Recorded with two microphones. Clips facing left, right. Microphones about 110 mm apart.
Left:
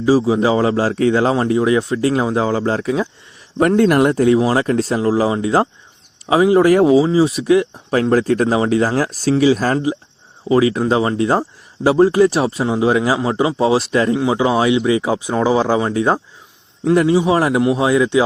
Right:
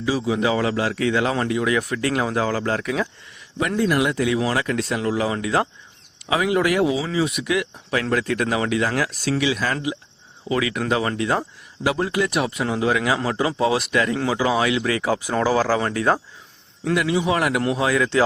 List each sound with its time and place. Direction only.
0.0 s a man's voice: 35° left (ahead or behind)
3.8 s speech: 65° left (ahead or behind)
4.0 s a man's voice: 40° left (ahead or behind); by 16.2 s 20° left (ahead or behind)
16.9 s a man's voice: 35° left (ahead or behind)